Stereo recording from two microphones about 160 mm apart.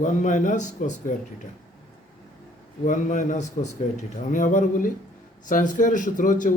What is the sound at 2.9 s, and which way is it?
A man's voice, 50° left (ahead or behind).